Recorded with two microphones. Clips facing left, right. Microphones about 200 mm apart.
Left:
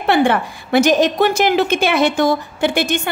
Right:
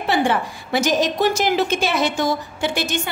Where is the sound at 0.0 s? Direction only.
60° left (ahead or behind).